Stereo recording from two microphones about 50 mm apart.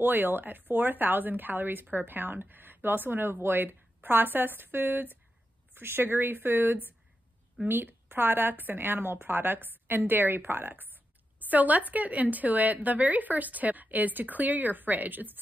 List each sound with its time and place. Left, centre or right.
0.0 s a woman's voice: right